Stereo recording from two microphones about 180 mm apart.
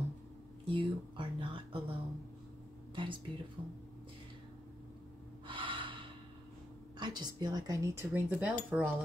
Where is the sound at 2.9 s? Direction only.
30° right (ahead or behind).